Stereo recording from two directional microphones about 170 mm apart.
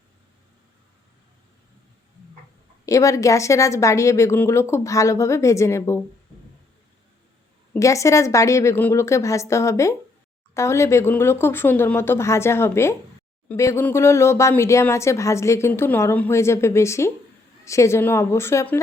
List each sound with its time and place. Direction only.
2.8 s speech: 20° left (ahead or behind)
7.7 s speech: 20° left (ahead or behind)